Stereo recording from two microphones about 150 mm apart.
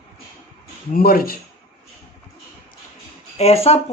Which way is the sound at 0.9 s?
80° left.